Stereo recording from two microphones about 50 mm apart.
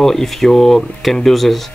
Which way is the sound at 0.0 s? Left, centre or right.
Centre.